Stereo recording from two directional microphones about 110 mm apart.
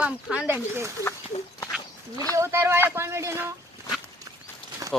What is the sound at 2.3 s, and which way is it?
Speech, 20° right (ahead or behind).